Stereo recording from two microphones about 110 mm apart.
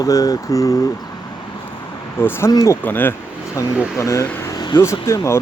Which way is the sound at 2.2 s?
20° left (ahead or behind).